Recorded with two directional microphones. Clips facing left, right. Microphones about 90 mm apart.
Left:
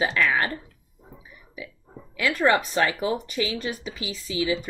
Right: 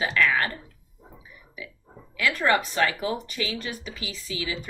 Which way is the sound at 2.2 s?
20° left (ahead or behind).